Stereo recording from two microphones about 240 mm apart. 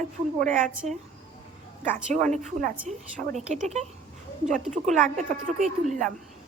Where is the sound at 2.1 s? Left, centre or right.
Right.